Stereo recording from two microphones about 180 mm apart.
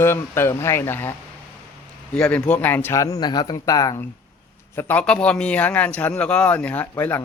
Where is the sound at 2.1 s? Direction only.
5° left (ahead or behind).